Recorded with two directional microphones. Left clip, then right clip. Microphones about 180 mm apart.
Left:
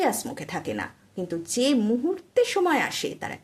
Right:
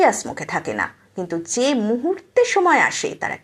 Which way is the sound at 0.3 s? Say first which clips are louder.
Right 8 dB; 30° left (ahead or behind).